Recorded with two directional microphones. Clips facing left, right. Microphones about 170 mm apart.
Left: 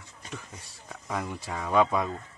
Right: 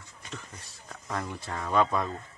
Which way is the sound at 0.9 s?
5° left (ahead or behind).